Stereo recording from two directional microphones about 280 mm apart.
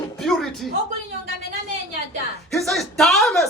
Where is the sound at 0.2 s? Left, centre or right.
Centre.